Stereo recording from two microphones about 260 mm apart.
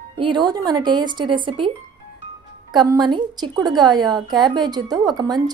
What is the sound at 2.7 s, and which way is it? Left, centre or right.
A woman's voice, centre.